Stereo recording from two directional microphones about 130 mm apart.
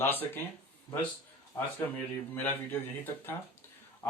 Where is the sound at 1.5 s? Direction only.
20° left (ahead or behind).